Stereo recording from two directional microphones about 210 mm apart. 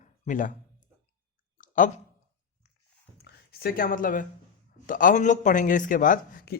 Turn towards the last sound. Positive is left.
turn(degrees=45)  # may be behind; listen again after turning